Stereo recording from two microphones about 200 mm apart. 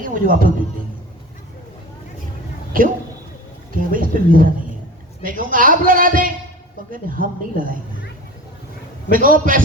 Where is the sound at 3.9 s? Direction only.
45° right (ahead or behind).